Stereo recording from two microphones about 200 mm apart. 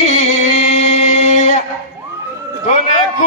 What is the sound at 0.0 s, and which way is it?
Music, 35° left (ahead or behind).